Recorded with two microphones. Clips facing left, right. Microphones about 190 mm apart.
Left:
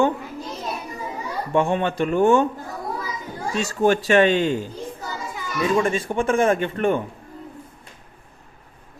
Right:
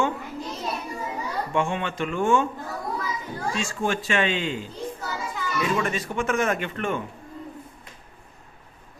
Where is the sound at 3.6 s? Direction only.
40° left (ahead or behind).